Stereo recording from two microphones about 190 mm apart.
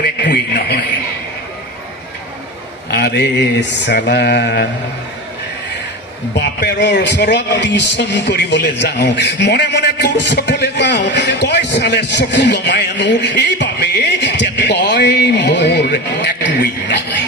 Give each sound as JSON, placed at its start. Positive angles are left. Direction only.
{"t": 0.0, "sound": "a man's voice", "side_deg": 50}
{"t": 2.9, "sound": "a man's voice", "side_deg": 60}
{"t": 6.3, "sound": "a man's voice", "side_deg": 65}